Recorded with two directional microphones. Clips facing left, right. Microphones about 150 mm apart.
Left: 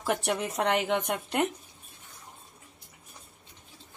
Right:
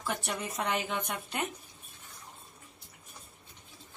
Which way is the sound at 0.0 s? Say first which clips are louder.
Left 6 dB; 70° left (ahead or behind).